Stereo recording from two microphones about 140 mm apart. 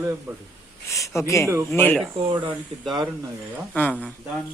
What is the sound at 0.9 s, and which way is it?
Speech, 20° left (ahead or behind).